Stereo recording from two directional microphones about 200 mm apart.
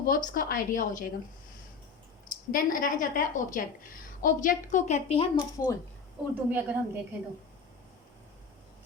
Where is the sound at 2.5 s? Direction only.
45° left (ahead or behind).